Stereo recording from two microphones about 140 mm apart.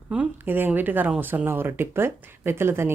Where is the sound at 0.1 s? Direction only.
10° right (ahead or behind).